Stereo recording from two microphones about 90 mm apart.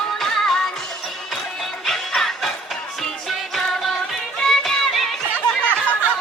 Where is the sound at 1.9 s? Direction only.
5° left (ahead or behind).